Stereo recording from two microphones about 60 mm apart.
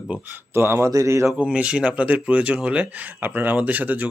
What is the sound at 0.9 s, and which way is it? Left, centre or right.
Speech, right.